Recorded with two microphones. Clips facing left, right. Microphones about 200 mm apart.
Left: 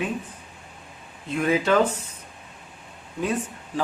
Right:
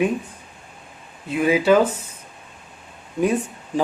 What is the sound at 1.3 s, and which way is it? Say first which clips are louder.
Speech: right 5 dB; 10° right (ahead or behind).